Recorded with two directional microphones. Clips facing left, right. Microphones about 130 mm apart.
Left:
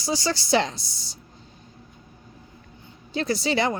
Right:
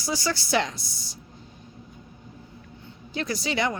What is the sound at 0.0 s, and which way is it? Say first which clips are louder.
Speech: left 2 dB; 25° left (ahead or behind).